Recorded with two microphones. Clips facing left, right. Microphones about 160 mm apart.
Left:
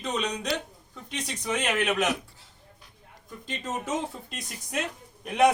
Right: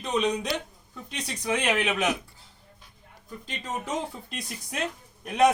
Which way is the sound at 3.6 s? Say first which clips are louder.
Left 1 dB; centre (ahead or behind).